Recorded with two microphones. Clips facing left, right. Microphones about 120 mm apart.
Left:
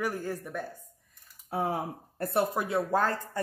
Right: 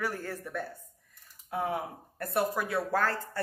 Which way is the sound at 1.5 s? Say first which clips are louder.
Left 2 dB; 35° left (ahead or behind).